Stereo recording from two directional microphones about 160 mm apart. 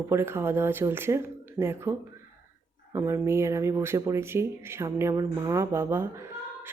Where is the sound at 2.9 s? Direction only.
20° right (ahead or behind).